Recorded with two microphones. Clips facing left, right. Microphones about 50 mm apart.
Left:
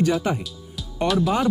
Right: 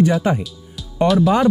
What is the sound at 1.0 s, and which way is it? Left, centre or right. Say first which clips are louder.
Speech: right 6 dB; centre.